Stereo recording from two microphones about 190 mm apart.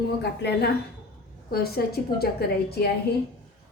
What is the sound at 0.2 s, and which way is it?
A woman's voice, 60° left (ahead or behind).